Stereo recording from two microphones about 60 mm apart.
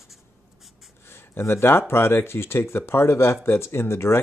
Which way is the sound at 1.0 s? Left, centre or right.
Left.